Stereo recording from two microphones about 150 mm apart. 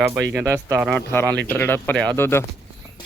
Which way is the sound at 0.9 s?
10° left (ahead or behind).